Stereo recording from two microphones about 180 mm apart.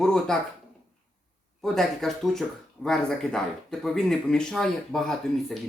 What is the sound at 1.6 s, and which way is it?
Speech, centre (ahead or behind).